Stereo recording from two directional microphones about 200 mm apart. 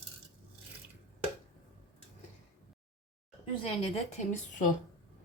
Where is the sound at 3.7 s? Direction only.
30° left (ahead or behind).